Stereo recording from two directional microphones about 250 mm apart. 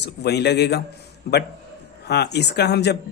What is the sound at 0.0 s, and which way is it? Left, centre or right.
A man's voice, left.